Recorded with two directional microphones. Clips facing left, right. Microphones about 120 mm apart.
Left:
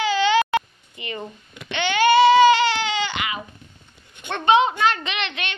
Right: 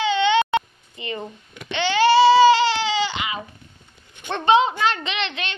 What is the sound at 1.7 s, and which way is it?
Baby cry, 30° right (ahead or behind).